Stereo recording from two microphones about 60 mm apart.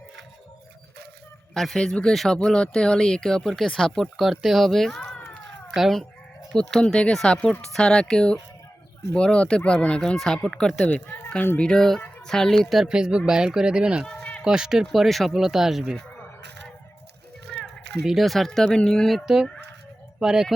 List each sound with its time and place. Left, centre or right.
1.5 s speech: centre
6.6 s speech: centre
10.8 s speech: left
11.5 s speech: centre
12.9 s speech: centre
14.8 s speech: centre
17.5 s children playing: centre
18.0 s speech: centre
19.2 s speech: centre